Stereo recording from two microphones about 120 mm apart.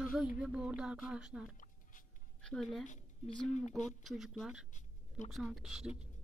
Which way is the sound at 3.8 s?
Centre (ahead or behind).